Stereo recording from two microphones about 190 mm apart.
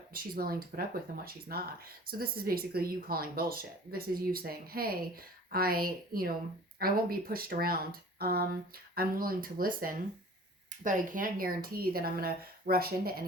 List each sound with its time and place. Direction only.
0.1 s speech: 50° right (ahead or behind)